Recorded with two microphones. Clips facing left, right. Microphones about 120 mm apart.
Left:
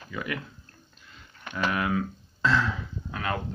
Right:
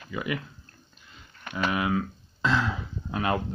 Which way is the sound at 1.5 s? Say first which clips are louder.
Right 1 dB; 10° right (ahead or behind).